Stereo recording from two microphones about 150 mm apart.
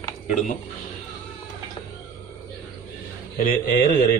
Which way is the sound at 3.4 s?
65° left (ahead or behind).